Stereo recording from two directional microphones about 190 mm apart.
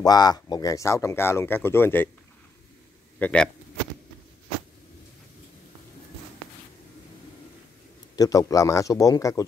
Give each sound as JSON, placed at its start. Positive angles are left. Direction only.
{"t": 0.0, "sound": "speech", "side_deg": 20}
{"t": 3.2, "sound": "speech", "side_deg": 5}
{"t": 8.2, "sound": "speech", "side_deg": 20}